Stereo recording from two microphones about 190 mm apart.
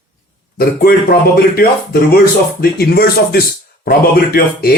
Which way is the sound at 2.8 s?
55° left (ahead or behind).